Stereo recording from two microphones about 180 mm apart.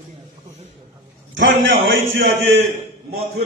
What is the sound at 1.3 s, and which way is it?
Speech, 90° right.